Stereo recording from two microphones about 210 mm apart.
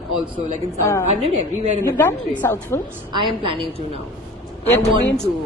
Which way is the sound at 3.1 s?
20° right (ahead or behind).